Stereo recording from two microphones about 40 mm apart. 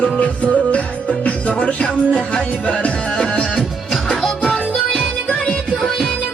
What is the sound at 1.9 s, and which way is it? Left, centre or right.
Music, left.